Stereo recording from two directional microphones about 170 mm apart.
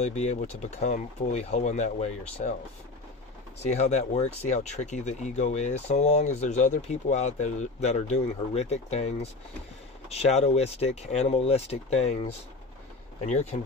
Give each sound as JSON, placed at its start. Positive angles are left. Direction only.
{"t": 0.0, "sound": "speech", "side_deg": 40}
{"t": 3.5, "sound": "speech", "side_deg": 40}